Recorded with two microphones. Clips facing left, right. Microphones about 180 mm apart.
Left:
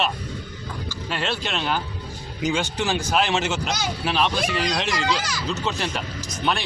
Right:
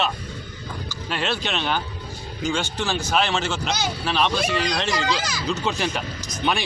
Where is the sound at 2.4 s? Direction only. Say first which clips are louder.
Left 1 dB; 15° left (ahead or behind).